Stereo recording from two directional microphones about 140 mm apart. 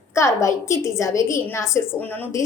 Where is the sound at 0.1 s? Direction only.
20° left (ahead or behind).